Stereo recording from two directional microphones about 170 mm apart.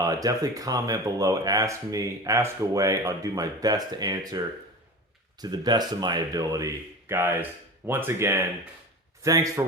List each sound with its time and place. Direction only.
0.0 s speech: 20° right (ahead or behind)